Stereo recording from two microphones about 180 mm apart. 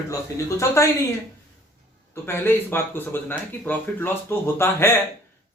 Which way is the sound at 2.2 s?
10° left (ahead or behind).